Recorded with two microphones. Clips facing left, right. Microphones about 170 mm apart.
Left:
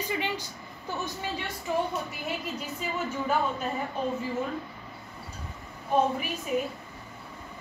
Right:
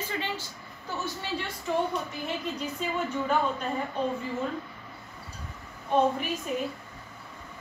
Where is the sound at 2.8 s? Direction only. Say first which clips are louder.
Right 2 dB; 5° left (ahead or behind).